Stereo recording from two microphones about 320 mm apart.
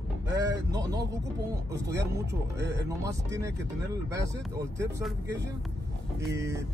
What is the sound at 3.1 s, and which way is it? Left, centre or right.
Speech, centre.